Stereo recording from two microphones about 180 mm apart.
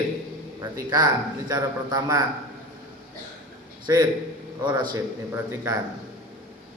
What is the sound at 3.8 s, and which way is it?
A man's voice, 25° right (ahead or behind).